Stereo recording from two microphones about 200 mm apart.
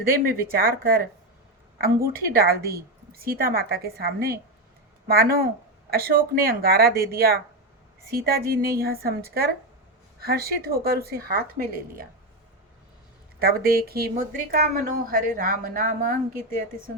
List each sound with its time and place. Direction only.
0.0 s speech: 45° right (ahead or behind)
2.1 s speech: 50° right (ahead or behind)
13.4 s speech: 50° right (ahead or behind)